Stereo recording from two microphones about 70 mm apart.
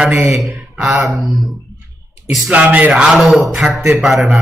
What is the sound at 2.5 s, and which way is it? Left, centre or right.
Speech, right.